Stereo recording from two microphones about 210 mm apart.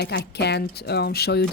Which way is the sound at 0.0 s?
50° left (ahead or behind).